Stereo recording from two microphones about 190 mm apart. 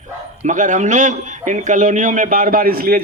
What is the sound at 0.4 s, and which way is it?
A man's voice, 40° right (ahead or behind).